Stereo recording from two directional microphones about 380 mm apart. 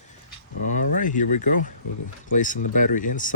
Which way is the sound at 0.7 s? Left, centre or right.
Centre.